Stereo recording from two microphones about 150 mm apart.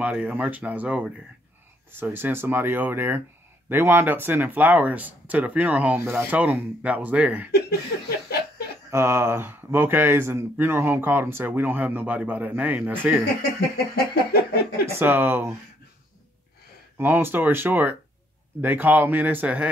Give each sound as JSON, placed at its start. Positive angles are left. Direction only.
{"t": 0.0, "sound": "speech", "side_deg": -10}
{"t": 7.9, "sound": "chuckle", "side_deg": 90}
{"t": 8.9, "sound": "speech", "side_deg": -15}
{"t": 14.3, "sound": "a sound", "side_deg": 90}
{"t": 14.9, "sound": "speech", "side_deg": -15}
{"t": 17.0, "sound": "speech", "side_deg": -15}